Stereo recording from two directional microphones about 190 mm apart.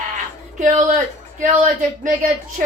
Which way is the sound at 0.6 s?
40° right (ahead or behind).